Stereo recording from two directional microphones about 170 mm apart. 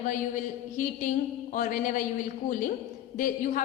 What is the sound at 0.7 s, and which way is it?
A woman's voice, 50° left (ahead or behind).